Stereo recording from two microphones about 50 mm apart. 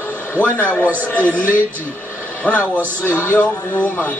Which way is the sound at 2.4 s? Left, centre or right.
Left.